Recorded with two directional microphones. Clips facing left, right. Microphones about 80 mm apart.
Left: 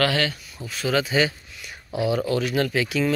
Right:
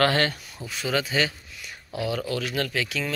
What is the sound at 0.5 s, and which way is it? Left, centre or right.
Speech, centre.